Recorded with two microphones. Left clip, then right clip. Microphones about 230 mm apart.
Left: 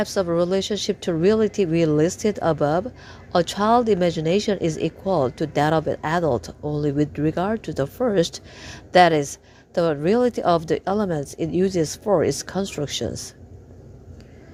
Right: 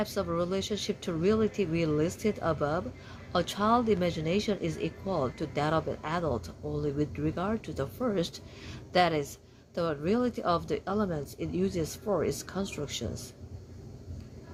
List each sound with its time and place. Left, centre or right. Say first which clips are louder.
0.0 s speech: left 10 dB; left